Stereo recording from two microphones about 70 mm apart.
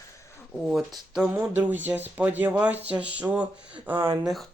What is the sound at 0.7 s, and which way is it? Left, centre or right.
Speech, centre.